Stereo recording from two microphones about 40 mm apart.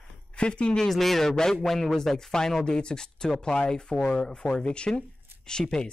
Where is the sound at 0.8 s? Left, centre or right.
Centre.